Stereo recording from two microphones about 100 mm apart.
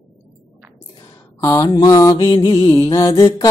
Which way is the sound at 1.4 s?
35° left (ahead or behind).